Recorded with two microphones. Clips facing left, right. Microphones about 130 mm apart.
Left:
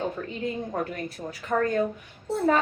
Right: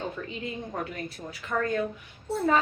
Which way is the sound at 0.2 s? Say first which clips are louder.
Left 4 dB; 45° left (ahead or behind).